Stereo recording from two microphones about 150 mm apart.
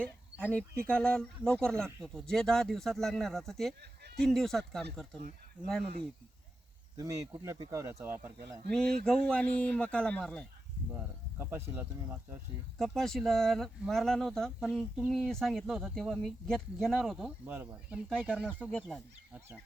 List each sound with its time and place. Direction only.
0.0 s speech: 10° left (ahead or behind)
6.9 s speech: 20° right (ahead or behind)
9.0 s speech: 5° left (ahead or behind)
10.9 s speech: 15° right (ahead or behind)
12.8 s speech: centre (ahead or behind)
17.4 s speech: 10° right (ahead or behind)
18.4 s speech: 5° left (ahead or behind)